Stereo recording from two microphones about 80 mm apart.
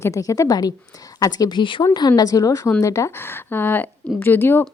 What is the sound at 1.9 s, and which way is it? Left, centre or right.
A woman's voice, left.